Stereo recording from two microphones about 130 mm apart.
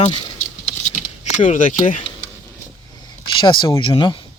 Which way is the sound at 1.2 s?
70° left (ahead or behind).